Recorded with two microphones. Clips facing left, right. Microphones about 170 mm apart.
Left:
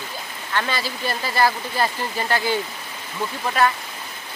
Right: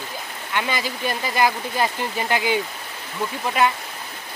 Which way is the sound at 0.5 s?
15° right (ahead or behind).